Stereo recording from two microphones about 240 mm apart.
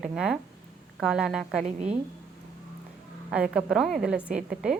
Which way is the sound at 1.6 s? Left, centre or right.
Right.